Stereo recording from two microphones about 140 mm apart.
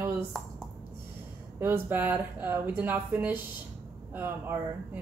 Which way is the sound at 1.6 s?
15° right (ahead or behind).